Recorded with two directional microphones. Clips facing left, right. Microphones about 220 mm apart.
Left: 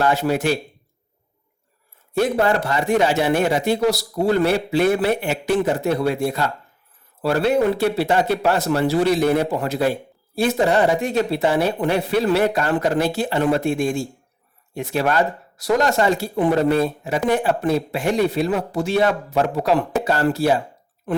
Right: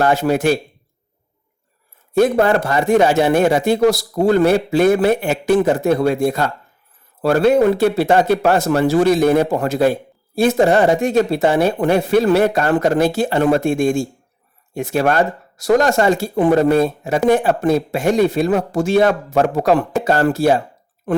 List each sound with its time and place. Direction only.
0.0 s speech: 50° right (ahead or behind)
2.1 s speech: 50° right (ahead or behind)